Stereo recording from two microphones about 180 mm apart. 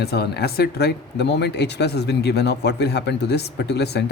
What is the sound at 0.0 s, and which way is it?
Speech, 60° left (ahead or behind).